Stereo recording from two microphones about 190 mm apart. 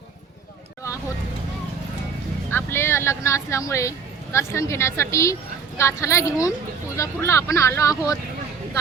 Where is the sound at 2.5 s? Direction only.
10° left (ahead or behind).